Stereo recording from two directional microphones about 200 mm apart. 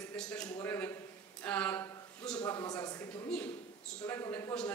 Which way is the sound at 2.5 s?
20° left (ahead or behind).